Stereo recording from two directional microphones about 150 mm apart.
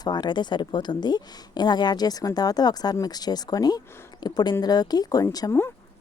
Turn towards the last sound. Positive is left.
turn(degrees=25)  # may be behind; listen again after turning